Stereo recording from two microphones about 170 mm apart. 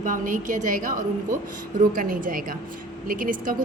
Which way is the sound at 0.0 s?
50° right (ahead or behind).